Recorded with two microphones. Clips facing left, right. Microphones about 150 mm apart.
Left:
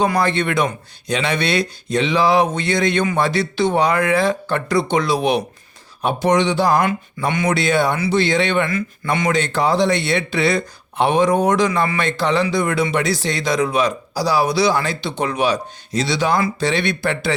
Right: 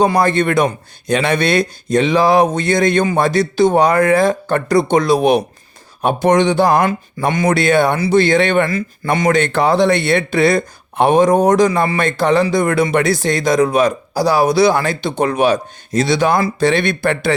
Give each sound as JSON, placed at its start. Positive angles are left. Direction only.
{"t": 0.0, "sound": "speech", "side_deg": -40}
{"t": 6.8, "sound": "speech", "side_deg": -40}
{"t": 7.9, "sound": "speech", "side_deg": -40}